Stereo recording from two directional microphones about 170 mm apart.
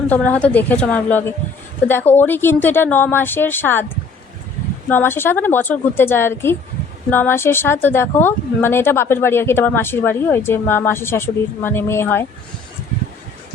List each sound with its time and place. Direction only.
0.1 s a woman's voice: 10° left (ahead or behind)
4.9 s a woman's voice: 10° left (ahead or behind)